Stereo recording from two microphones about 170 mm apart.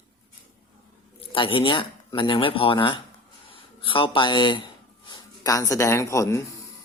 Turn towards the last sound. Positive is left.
turn(degrees=15)  # may be behind; listen again after turning